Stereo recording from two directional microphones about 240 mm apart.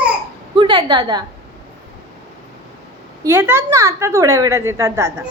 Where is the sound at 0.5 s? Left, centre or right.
Centre.